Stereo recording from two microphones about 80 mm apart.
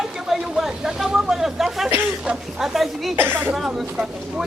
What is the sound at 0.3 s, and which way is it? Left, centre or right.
Chatter, centre.